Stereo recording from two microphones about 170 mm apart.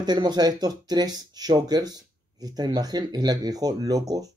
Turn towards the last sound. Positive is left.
turn(degrees=-20)  # may be behind; listen again after turning